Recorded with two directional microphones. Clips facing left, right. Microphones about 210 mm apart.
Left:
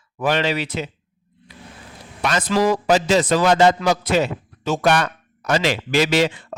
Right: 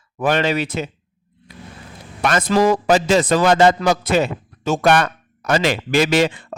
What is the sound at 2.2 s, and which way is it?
A man's voice, 50° right (ahead or behind).